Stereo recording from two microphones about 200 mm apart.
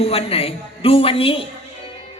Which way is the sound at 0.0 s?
30° left (ahead or behind).